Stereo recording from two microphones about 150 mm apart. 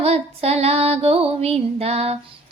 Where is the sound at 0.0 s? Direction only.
45° right (ahead or behind).